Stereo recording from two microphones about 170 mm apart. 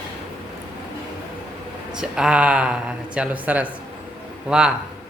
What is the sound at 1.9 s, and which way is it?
Speech, 5° right (ahead or behind).